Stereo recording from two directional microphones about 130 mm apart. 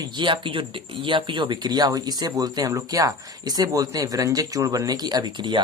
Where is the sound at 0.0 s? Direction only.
40° right (ahead or behind).